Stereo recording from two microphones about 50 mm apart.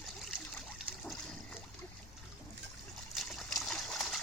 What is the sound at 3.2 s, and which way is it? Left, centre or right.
Splash, centre.